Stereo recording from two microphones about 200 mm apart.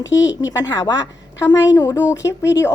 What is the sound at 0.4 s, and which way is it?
A woman's voice, 15° left (ahead or behind).